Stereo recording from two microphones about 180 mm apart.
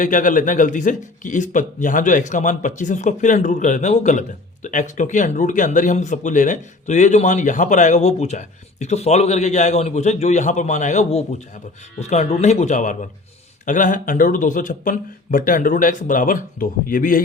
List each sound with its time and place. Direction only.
0.0 s speech: 45° left (ahead or behind)